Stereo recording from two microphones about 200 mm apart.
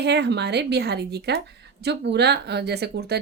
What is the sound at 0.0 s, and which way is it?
A woman's voice, 60° right (ahead or behind).